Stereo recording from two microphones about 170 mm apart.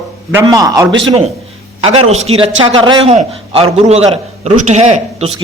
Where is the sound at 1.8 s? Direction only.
40° right (ahead or behind).